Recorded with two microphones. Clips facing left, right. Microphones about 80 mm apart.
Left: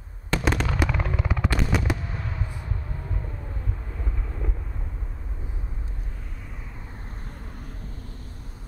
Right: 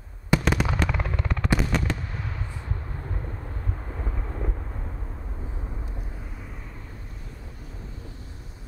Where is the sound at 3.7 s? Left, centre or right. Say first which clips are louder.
Right 4 dB; right.